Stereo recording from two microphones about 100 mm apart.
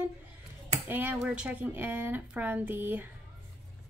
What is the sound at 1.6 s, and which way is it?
A woman's voice, 20° right (ahead or behind).